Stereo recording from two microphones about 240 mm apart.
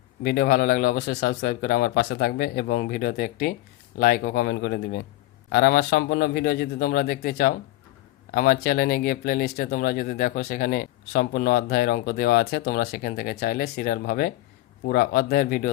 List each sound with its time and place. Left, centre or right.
0.2 s speech: left